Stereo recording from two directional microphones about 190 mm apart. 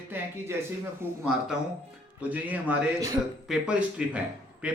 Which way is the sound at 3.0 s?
20° right (ahead or behind).